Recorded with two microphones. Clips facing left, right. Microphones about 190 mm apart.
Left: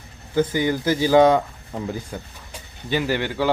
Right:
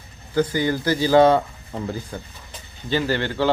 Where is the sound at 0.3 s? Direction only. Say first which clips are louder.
Even; 20° left (ahead or behind).